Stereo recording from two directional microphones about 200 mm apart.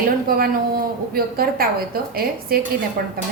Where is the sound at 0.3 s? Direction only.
50° right (ahead or behind).